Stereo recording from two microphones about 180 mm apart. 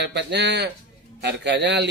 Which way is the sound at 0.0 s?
70° right (ahead or behind).